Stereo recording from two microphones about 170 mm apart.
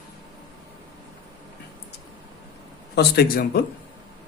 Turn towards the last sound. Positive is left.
turn(degrees=65)  # may be behind; listen again after turning